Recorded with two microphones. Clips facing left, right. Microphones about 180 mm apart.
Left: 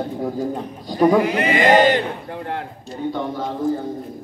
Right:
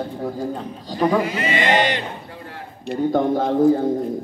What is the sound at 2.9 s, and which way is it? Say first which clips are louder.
Speech: right 6 dB; 50° right (ahead or behind).